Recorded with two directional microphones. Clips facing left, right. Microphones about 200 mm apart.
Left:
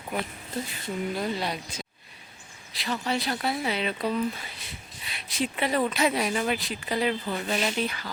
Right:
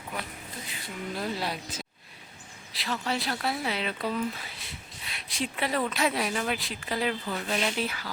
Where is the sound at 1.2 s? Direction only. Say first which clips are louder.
Left 2 dB; 5° right (ahead or behind).